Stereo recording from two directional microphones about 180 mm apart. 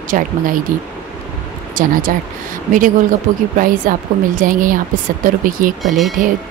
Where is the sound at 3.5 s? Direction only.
50° right (ahead or behind).